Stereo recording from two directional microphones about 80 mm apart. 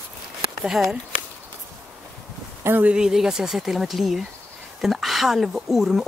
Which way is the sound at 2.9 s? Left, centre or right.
Centre.